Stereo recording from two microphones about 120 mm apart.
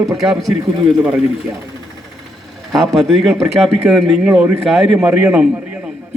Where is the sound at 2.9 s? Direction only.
Centre (ahead or behind).